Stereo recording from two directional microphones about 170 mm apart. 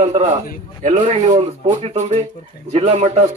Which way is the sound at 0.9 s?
45° right (ahead or behind).